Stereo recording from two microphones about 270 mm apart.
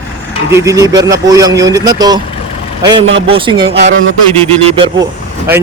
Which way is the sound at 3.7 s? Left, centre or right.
Right.